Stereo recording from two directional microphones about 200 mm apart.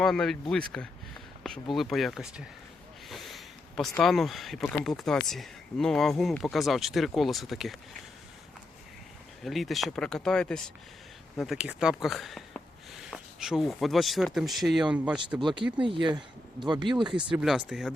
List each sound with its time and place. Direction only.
0.0 s speech: centre (ahead or behind)
9.4 s speech: centre (ahead or behind)
15.4 s speech: 25° right (ahead or behind)
17.3 s speech: 5° right (ahead or behind)